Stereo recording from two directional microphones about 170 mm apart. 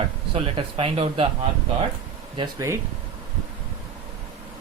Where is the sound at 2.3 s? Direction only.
15° right (ahead or behind).